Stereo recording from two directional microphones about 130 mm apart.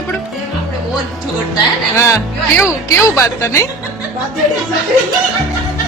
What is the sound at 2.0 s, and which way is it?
A woman's voice, 20° left (ahead or behind).